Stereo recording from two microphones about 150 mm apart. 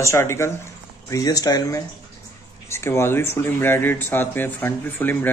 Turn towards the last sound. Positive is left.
turn(degrees=15)  # may be behind; listen again after turning